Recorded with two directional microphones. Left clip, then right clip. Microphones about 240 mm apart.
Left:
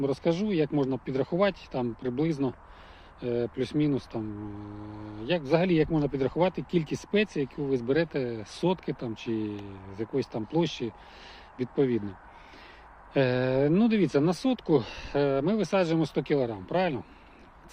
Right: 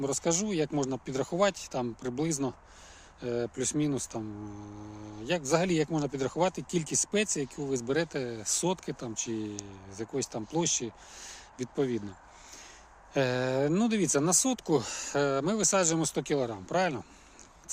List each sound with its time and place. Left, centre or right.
0.0 s speech: centre
5.2 s speech: centre
13.1 s speech: centre